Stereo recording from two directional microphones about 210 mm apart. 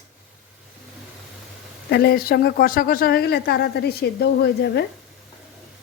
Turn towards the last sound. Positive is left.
turn(degrees=55)  # may be behind; listen again after turning